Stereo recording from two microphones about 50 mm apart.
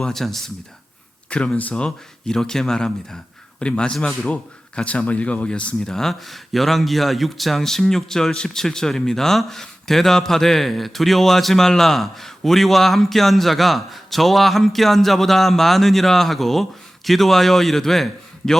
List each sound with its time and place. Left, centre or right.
0.1 s a man's voice: centre
1.3 s speech: left
5.8 s a man's voice: centre